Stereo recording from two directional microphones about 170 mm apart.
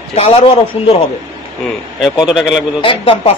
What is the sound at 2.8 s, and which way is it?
Speech, 30° left (ahead or behind).